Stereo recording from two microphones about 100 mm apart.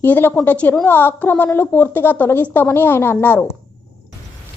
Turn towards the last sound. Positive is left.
turn(degrees=20)  # may be behind; listen again after turning